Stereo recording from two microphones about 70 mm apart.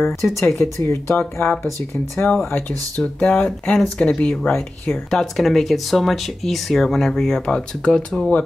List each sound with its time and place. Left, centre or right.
0.0 s speech: left
1.1 s speech: left
4.5 s speech: left
5.1 s speech: centre